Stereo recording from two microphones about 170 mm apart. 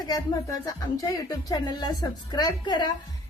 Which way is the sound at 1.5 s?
25° left (ahead or behind).